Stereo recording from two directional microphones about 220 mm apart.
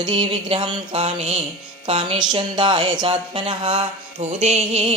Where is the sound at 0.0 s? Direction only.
20° right (ahead or behind).